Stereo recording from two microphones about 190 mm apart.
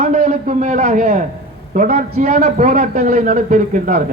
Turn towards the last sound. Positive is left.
turn(degrees=-45)  # may be behind; listen again after turning